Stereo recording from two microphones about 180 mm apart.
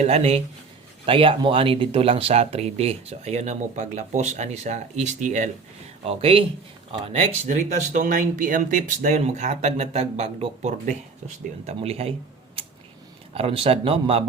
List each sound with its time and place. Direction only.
0.0 s speech: 35° right (ahead or behind)
13.3 s speech: 30° right (ahead or behind)